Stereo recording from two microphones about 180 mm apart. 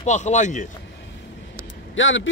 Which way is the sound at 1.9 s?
90° left.